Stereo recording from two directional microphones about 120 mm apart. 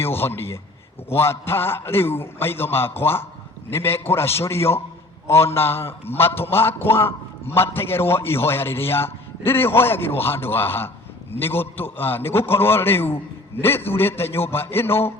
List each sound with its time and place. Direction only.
0.0 s a man's voice: 20° left (ahead or behind)